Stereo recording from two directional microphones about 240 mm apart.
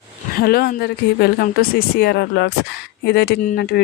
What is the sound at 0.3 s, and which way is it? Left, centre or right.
Speech, left.